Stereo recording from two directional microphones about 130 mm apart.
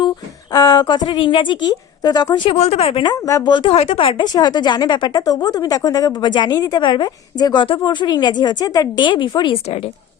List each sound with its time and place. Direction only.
0.5 s speech: 30° left (ahead or behind)
2.6 s a woman's voice: 50° left (ahead or behind)
3.1 s speech: 25° left (ahead or behind)
9.6 s a woman's voice: 50° left (ahead or behind)